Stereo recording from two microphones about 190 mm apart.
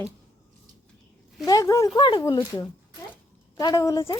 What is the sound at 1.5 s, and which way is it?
Speech, 20° left (ahead or behind).